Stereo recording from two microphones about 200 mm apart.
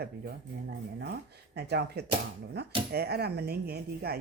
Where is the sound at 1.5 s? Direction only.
55° right (ahead or behind).